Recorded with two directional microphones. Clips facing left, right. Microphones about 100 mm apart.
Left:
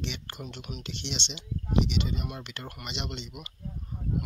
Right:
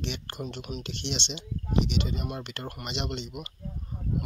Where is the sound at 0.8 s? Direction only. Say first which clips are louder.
Right 1 dB; 45° right (ahead or behind).